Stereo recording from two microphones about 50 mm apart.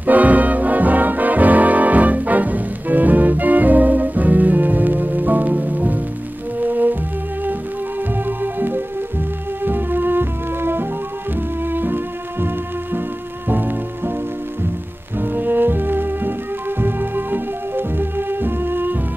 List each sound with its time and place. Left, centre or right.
0.0 s music: right
8.3 s music: right
15.1 s music: right